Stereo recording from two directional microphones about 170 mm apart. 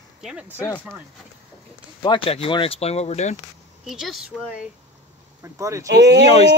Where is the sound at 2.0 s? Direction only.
30° left (ahead or behind).